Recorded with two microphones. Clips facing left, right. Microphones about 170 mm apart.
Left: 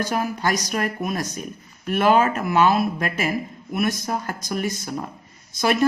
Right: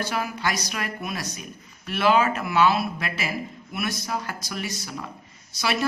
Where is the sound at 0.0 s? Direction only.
45° left (ahead or behind).